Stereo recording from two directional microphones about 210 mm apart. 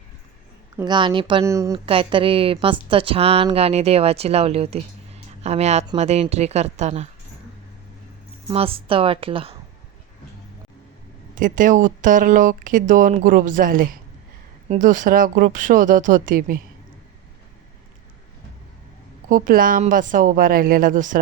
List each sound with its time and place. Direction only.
0.8 s speech: 20° right (ahead or behind)
1.9 s speech: 25° right (ahead or behind)
8.4 s speech: 25° right (ahead or behind)
11.3 s speech: 40° right (ahead or behind)
19.3 s speech: 40° right (ahead or behind)